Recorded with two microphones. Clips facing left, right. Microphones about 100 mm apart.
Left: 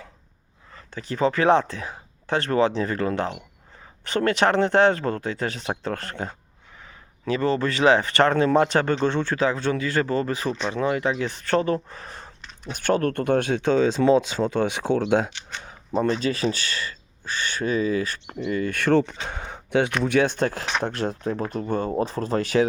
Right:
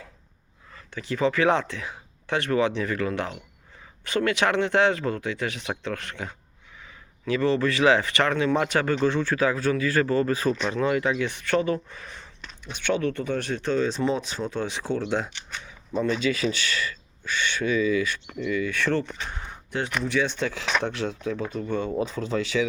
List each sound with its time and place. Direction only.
1.1 s speech: 30° left (ahead or behind); by 16.0 s 60° left (ahead or behind)
16.0 s speech: 45° left (ahead or behind)
18.6 s speech: 50° left (ahead or behind)